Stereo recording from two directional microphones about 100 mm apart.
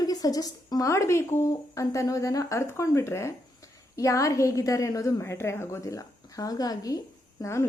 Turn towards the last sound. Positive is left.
turn(degrees=25)  # may be behind; listen again after turning